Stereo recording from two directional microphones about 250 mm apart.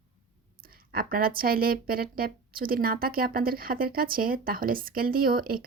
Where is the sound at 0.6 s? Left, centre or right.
Right.